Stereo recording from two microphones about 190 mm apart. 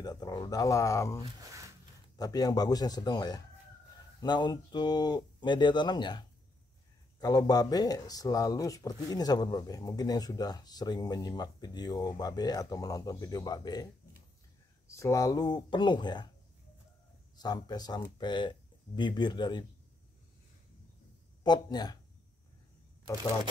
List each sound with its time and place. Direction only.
0.0 s speech: 20° left (ahead or behind)
14.9 s speech: 15° left (ahead or behind)
17.4 s speech: 20° left (ahead or behind)
21.5 s speech: 20° left (ahead or behind)